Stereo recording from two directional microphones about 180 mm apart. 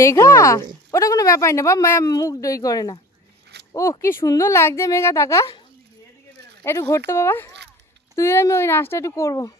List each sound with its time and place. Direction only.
0.0 s speech: 15° left (ahead or behind)
3.5 s a sound: 70° right (ahead or behind)
4.0 s speech: 15° left (ahead or behind)
6.6 s speech: 15° left (ahead or behind)